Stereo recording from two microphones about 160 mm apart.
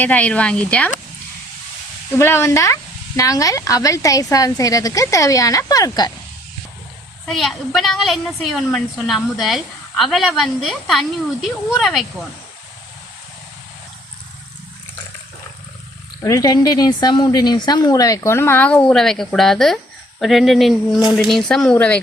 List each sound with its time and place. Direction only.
0.0 s a woman's voice: 10° left (ahead or behind)
2.1 s a woman's voice: 15° left (ahead or behind)
7.3 s a woman's voice: centre (ahead or behind)
16.2 s a woman's voice: 20° left (ahead or behind)